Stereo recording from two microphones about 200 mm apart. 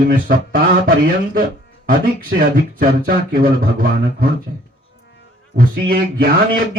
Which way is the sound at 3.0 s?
45° right (ahead or behind).